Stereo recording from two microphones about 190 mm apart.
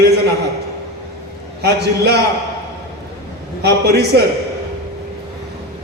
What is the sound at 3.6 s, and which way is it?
Speech, 60° right (ahead or behind).